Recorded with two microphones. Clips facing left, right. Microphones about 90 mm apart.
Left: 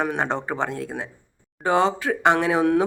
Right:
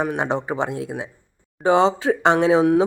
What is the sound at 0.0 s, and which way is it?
Speech, 10° right (ahead or behind).